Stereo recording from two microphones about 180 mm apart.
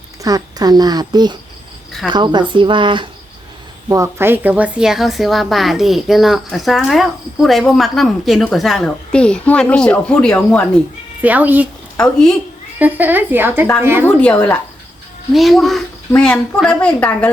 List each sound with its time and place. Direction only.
0.2 s speech: 20° right (ahead or behind)
3.8 s a woman's voice: 15° right (ahead or behind); by 10.7 s 10° left (ahead or behind)
11.2 s speech: 10° right (ahead or behind)
12.8 s speech: 10° right (ahead or behind)
14.0 s a woman's voice: 5° left (ahead or behind)